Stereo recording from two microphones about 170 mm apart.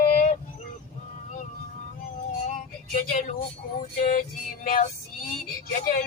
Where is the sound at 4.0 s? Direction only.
45° left (ahead or behind).